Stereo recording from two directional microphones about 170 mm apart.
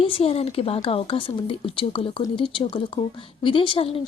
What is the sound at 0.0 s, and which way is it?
Speech, 35° left (ahead or behind).